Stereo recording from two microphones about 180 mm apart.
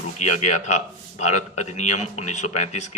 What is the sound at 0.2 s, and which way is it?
A man's voice, 40° left (ahead or behind).